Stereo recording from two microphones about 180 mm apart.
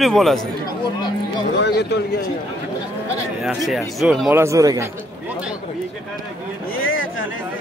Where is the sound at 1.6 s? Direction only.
65° left (ahead or behind).